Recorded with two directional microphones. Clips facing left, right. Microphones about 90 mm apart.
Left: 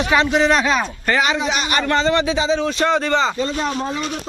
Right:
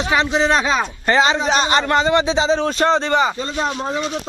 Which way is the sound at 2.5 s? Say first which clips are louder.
Right 1 dB; 40° right (ahead or behind).